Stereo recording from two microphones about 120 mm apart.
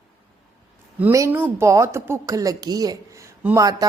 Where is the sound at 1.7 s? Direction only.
25° right (ahead or behind).